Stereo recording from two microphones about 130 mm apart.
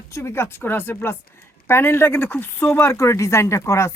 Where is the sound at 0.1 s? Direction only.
20° left (ahead or behind).